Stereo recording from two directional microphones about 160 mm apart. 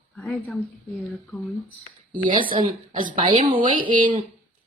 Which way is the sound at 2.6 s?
55° right (ahead or behind).